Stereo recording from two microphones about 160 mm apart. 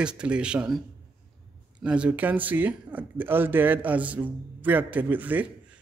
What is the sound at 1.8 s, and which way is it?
Speech, 5° right (ahead or behind).